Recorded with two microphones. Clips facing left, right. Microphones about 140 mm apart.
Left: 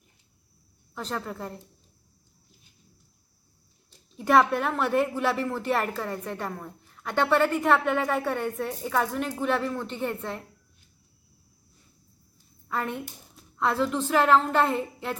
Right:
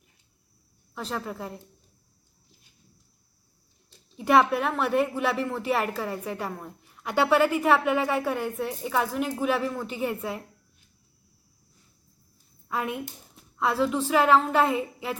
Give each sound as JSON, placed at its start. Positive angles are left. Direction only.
{"t": 0.9, "sound": "a woman's voice", "side_deg": -5}
{"t": 4.2, "sound": "a woman's voice", "side_deg": 0}
{"t": 12.6, "sound": "a woman's voice", "side_deg": -10}